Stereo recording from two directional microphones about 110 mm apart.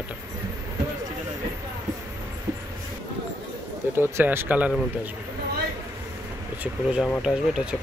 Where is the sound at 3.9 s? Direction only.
20° right (ahead or behind).